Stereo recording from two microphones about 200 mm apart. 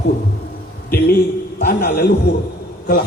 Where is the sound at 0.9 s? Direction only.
50° left (ahead or behind).